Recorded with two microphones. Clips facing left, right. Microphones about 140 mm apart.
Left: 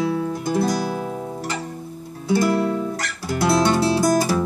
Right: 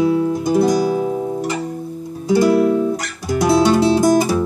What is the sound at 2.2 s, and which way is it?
Music, 15° right (ahead or behind).